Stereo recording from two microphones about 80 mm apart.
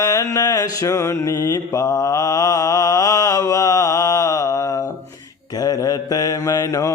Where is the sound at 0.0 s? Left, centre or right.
Left.